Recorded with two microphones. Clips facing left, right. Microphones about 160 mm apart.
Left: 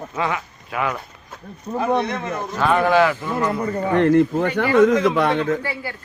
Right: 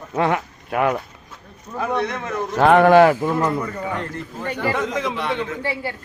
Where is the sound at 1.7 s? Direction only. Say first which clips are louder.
Left 5 dB; 35° left (ahead or behind).